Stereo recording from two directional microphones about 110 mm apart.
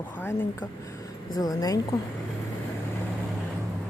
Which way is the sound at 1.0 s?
35° left (ahead or behind).